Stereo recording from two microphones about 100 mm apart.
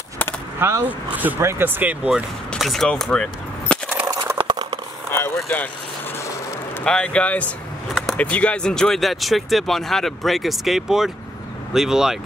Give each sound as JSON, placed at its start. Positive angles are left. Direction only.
{"t": 0.6, "sound": "speech", "side_deg": -25}
{"t": 0.8, "sound": "speech", "side_deg": -15}
{"t": 2.5, "sound": "gunshot", "side_deg": 0}
{"t": 4.0, "sound": "a sound", "side_deg": -35}
{"t": 4.4, "sound": "a sound", "side_deg": -55}
{"t": 5.1, "sound": "vehicle", "side_deg": 20}
{"t": 6.8, "sound": "speech", "side_deg": 10}